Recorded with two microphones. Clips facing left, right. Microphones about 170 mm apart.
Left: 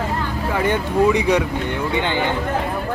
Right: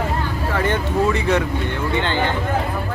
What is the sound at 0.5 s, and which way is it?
Speech, 10° left (ahead or behind).